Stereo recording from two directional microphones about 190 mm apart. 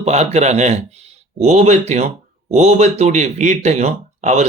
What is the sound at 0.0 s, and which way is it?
Speech, 35° right (ahead or behind).